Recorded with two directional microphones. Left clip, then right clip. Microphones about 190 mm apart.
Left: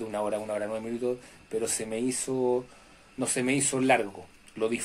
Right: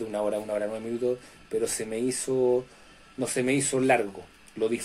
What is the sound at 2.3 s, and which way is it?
Speech, 30° left (ahead or behind).